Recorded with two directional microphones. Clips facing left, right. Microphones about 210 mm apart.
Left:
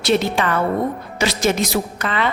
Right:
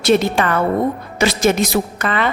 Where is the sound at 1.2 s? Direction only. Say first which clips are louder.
Right 4 dB; 50° right (ahead or behind).